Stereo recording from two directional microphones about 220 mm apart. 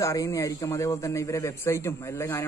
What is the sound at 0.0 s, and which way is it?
A man's voice, 15° left (ahead or behind).